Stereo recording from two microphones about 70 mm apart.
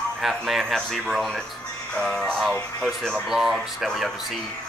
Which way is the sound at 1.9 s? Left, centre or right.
Centre.